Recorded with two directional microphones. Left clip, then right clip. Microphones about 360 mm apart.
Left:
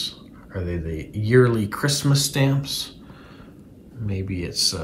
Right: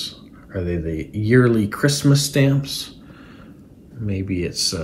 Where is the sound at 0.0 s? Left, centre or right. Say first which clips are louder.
Left 1 dB; centre.